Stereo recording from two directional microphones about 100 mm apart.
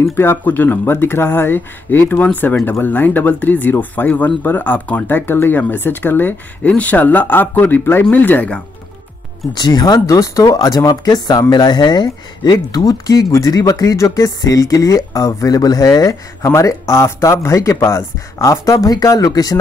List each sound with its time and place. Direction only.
0.0 s speech: 25° left (ahead or behind)
9.5 s speech: 45° left (ahead or behind)
9.9 s speech: 30° left (ahead or behind)